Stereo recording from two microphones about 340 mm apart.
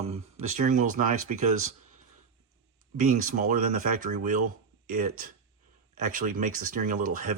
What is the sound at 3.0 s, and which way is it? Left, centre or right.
Speech, right.